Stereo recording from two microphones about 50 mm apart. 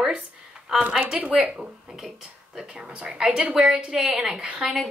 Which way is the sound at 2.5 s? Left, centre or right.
Centre.